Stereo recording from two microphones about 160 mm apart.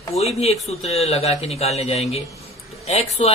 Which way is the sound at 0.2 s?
40° left (ahead or behind).